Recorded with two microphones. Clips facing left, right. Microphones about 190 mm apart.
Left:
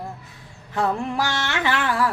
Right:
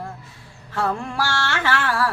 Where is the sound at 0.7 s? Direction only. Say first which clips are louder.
Left 1 dB; 20° left (ahead or behind).